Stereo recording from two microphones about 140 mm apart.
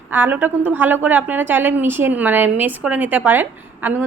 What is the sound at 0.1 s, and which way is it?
A woman's voice, 15° right (ahead or behind).